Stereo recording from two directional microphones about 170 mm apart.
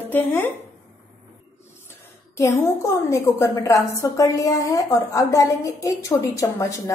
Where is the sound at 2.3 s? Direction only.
15° left (ahead or behind).